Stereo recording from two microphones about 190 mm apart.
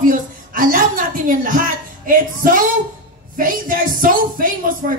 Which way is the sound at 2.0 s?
45° right (ahead or behind).